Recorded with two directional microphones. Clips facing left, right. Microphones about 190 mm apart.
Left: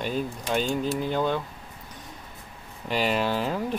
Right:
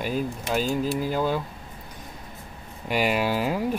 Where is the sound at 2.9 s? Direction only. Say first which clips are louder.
Right 1 dB; 10° right (ahead or behind).